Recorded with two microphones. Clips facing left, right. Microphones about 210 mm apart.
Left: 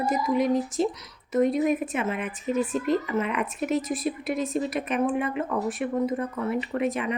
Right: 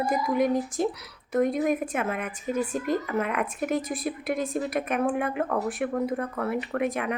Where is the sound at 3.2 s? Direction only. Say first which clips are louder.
Even; 50° right (ahead or behind).